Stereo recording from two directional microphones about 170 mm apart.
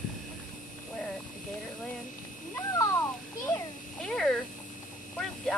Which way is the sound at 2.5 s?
20° left (ahead or behind).